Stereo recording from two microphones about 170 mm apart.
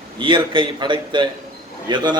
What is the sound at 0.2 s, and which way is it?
A man's voice, 30° right (ahead or behind).